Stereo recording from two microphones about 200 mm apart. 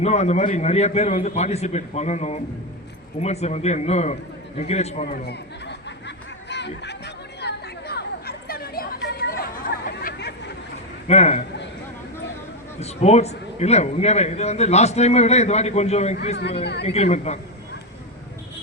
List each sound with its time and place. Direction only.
0.0 s a man's voice: 35° left (ahead or behind); by 5.7 s 55° left (ahead or behind)
6.5 s a sound: 60° left (ahead or behind)
11.1 s a man's voice: 35° left (ahead or behind)
12.8 s a man's voice: 30° left (ahead or behind)